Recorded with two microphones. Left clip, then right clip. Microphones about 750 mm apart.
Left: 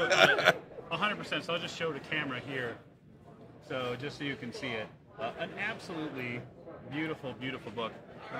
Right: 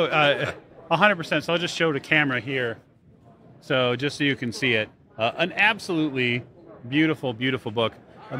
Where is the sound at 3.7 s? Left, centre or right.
Right.